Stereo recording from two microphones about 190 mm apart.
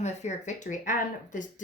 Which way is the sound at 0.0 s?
35° left (ahead or behind).